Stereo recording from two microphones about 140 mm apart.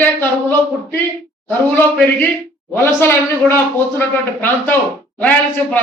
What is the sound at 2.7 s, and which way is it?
A man's voice, 15° left (ahead or behind).